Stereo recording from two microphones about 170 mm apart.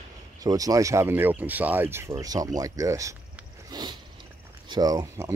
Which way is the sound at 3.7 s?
25° right (ahead or behind).